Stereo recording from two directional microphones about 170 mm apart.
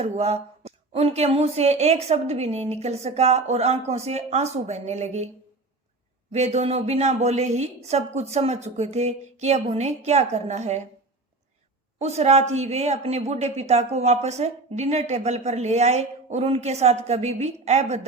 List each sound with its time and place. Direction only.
0.0 s speech: 40° right (ahead or behind)
6.3 s speech: 40° right (ahead or behind)
11.9 s speech: 40° right (ahead or behind)